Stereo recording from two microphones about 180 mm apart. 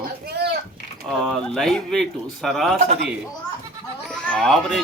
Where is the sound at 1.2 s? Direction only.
Centre (ahead or behind).